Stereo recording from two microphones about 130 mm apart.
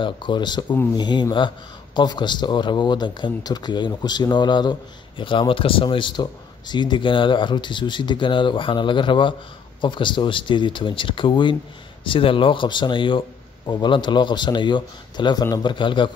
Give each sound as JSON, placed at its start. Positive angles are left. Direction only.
{"t": 0.0, "sound": "speech", "side_deg": 40}